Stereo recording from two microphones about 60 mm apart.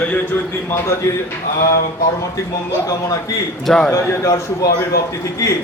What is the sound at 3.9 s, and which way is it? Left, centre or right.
Speech, left.